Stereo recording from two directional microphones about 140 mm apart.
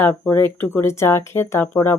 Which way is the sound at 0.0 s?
15° left (ahead or behind).